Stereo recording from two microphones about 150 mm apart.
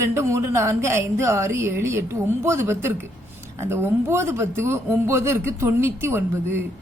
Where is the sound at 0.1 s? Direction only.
20° right (ahead or behind).